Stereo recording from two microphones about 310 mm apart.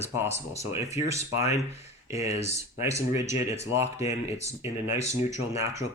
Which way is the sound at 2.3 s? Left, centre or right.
Left.